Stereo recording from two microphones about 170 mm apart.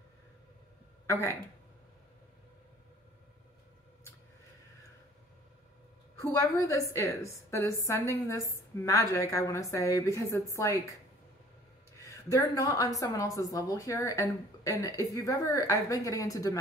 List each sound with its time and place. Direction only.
6.3 s a woman's voice: 15° left (ahead or behind)
12.0 s a woman's voice: 20° left (ahead or behind)